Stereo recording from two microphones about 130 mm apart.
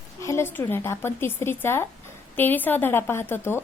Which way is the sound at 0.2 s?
20° left (ahead or behind).